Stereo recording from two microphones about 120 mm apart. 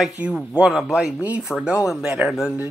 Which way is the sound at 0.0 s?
10° right (ahead or behind).